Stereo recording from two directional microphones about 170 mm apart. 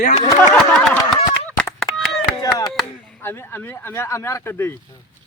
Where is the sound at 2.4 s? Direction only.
20° left (ahead or behind).